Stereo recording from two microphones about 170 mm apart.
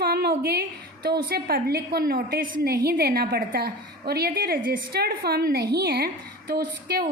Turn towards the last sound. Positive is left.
turn(degrees=-60)  # may be behind; listen again after turning